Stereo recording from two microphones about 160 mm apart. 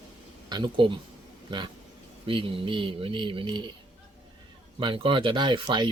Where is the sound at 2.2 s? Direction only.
35° right (ahead or behind).